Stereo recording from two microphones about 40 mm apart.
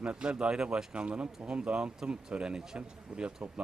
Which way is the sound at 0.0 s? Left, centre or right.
Right.